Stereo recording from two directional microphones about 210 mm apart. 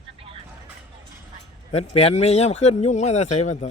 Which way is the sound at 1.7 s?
30° left (ahead or behind).